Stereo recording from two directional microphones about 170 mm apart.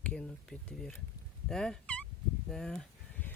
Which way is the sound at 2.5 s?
5° left (ahead or behind).